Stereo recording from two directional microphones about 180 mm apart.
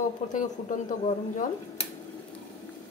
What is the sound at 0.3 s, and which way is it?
Speech, 45° left (ahead or behind).